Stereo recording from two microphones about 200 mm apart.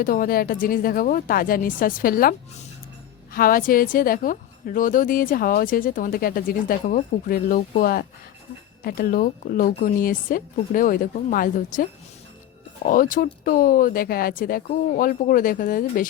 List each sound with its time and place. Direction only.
0.0 s a woman's voice: 45° left (ahead or behind)
3.3 s a woman's voice: 45° left (ahead or behind)